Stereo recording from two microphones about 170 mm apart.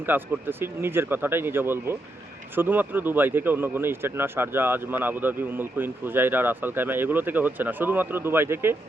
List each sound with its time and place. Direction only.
0.0 s speech: 10° right (ahead or behind)